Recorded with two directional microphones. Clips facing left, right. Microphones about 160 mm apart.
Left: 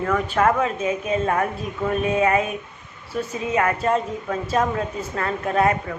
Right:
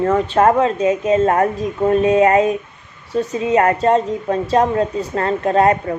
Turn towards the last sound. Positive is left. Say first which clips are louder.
# right 6 dB
turn(degrees=-35)  # may be behind; listen again after turning